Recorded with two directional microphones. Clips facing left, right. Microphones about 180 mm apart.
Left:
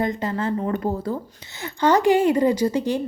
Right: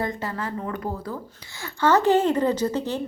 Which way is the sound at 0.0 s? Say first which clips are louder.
Left 5 dB; 20° left (ahead or behind).